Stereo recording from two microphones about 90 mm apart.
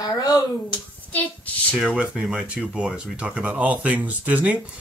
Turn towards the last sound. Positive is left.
turn(degrees=-15)  # may be behind; listen again after turning